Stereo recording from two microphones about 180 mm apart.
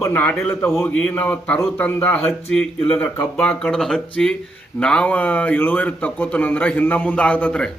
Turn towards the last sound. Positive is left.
turn(degrees=5)  # may be behind; listen again after turning